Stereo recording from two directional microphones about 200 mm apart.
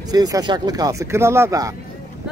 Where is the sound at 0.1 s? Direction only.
20° right (ahead or behind).